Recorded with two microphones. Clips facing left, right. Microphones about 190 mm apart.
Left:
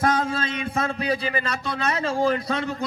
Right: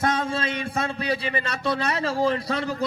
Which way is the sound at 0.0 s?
25° right (ahead or behind).